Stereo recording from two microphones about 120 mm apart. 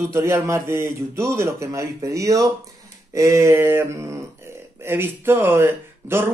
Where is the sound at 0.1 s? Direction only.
20° right (ahead or behind).